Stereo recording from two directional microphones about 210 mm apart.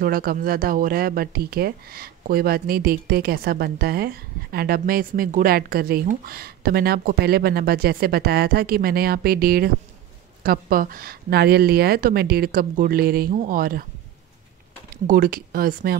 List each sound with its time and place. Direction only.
0.0 s speech: 45° right (ahead or behind)
15.0 s speech: 40° right (ahead or behind)